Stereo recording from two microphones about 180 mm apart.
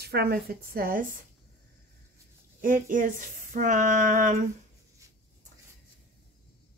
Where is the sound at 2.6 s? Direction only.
50° right (ahead or behind).